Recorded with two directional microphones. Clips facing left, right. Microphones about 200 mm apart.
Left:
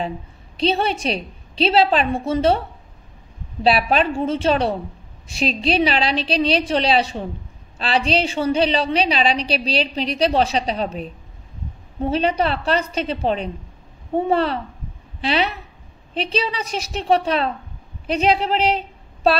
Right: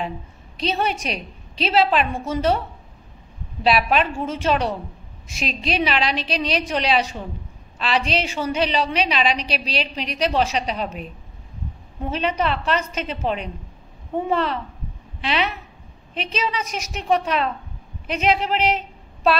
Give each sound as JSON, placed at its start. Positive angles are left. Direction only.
{"t": 0.6, "sound": "a woman's voice", "side_deg": 30}
{"t": 3.6, "sound": "a woman's voice", "side_deg": 30}